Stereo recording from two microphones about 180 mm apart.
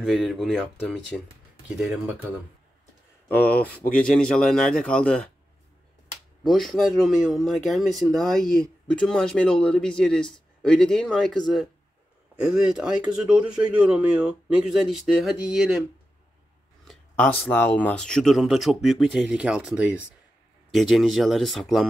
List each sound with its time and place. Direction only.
0.0 s speech: centre (ahead or behind)
3.3 s speech: 10° left (ahead or behind)
6.4 s speech: centre (ahead or behind)
16.8 s a sound: centre (ahead or behind)
17.4 s speech: 10° left (ahead or behind)